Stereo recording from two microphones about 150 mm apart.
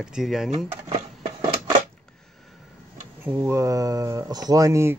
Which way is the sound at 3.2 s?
10° right (ahead or behind).